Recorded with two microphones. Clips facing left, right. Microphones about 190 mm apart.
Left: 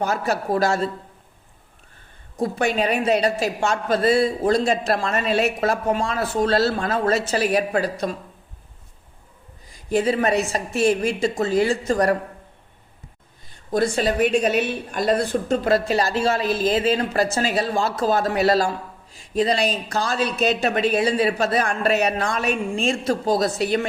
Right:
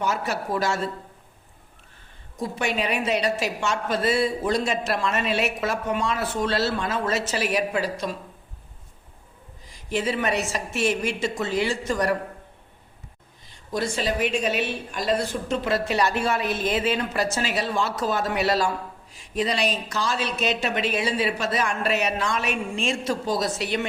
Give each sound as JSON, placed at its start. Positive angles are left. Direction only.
{"t": 0.0, "sound": "a woman's voice", "side_deg": 40}
{"t": 2.4, "sound": "a woman's voice", "side_deg": 40}
{"t": 5.5, "sound": "a woman's voice", "side_deg": 50}
{"t": 5.8, "sound": "a woman's voice", "side_deg": 30}
{"t": 7.5, "sound": "a woman's voice", "side_deg": 50}
{"t": 9.9, "sound": "a woman's voice", "side_deg": 35}
{"t": 13.7, "sound": "a woman's voice", "side_deg": 55}
{"t": 15.4, "sound": "a woman's voice", "side_deg": 40}
{"t": 16.4, "sound": "speech", "side_deg": 90}
{"t": 16.6, "sound": "a woman's voice", "side_deg": 35}
{"t": 23.0, "sound": "a woman's voice", "side_deg": 50}